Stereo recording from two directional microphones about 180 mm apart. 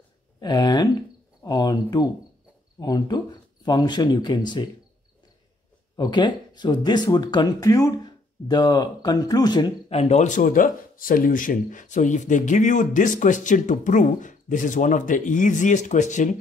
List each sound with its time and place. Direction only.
0.4 s speech: 20° left (ahead or behind)
5.9 s speech: 25° left (ahead or behind)
9.8 s speech: 35° left (ahead or behind)